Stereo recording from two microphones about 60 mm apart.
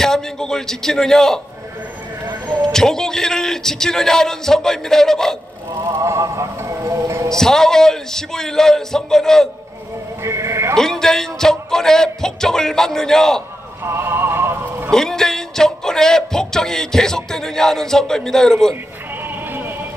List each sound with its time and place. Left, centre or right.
0.0 s a sound: centre
2.7 s music: centre
5.9 s music: right
7.2 s music: centre
10.2 s sheep: right
10.8 s music: centre
13.8 s music: right
14.9 s music: centre
19.2 s music: right